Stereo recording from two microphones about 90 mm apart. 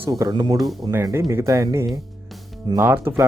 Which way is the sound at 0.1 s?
45° right (ahead or behind).